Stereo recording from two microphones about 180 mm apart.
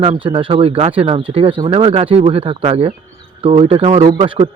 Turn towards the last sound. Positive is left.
turn(degrees=-30)  # may be behind; listen again after turning